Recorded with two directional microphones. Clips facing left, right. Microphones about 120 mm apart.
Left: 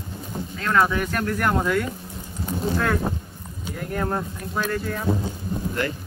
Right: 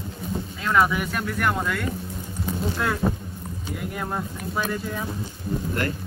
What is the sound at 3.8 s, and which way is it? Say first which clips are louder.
Speech: left 4 dB; 5° right (ahead or behind).